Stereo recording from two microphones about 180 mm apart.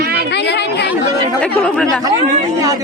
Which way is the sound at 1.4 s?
5° left (ahead or behind).